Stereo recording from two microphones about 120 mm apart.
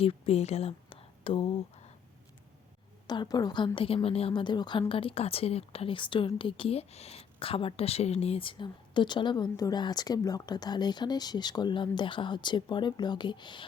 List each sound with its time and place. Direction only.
0.0 s speech: 55° left (ahead or behind)
3.1 s speech: 35° left (ahead or behind)
3.8 s a woman's voice: 50° left (ahead or behind)